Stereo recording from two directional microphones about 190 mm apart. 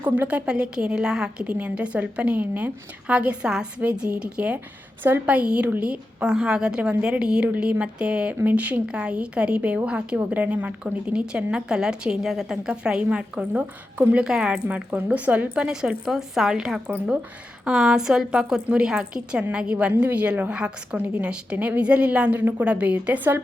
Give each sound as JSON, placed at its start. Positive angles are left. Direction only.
{"t": 0.0, "sound": "a woman's voice", "side_deg": -10}